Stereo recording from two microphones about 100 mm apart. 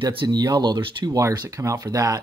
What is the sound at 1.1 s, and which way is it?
Speech, 40° right (ahead or behind).